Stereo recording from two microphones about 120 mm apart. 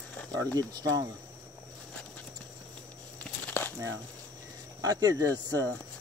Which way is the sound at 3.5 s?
15° left (ahead or behind).